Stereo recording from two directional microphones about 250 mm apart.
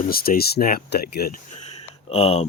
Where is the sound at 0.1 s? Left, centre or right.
Left.